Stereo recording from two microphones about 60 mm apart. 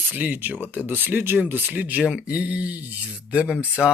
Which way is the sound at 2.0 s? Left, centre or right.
Centre.